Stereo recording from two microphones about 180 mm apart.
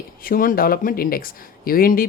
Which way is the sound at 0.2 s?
50° left (ahead or behind).